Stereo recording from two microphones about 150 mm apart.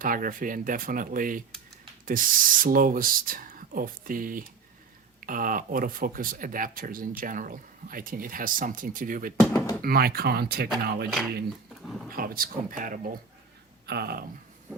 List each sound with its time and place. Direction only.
0.0 s speech: 65° right (ahead or behind)
9.6 s speech: 20° left (ahead or behind)
9.8 s speech: 90° right
12.1 s speech: 75° right (ahead or behind)
13.8 s speech: 90° right